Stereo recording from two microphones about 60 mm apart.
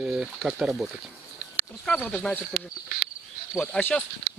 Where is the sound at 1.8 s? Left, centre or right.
Centre.